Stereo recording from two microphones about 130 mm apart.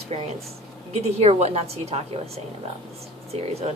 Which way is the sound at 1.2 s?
50° right (ahead or behind).